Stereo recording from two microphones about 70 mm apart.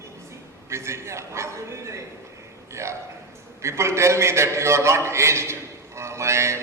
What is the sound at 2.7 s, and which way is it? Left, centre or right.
A man's voice, right.